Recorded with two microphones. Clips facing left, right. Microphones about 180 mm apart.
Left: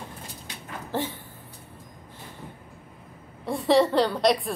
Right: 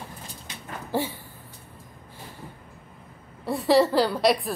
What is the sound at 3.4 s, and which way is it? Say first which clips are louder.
Chuckle: right 1 dB; centre (ahead or behind).